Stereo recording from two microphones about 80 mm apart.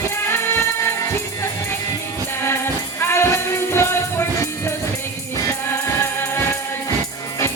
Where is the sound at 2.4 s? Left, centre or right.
Left.